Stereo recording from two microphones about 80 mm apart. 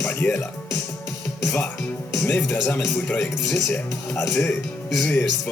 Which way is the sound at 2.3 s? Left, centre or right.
Centre.